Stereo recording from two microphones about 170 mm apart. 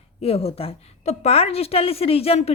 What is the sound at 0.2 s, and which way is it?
A woman's voice, 35° left (ahead or behind).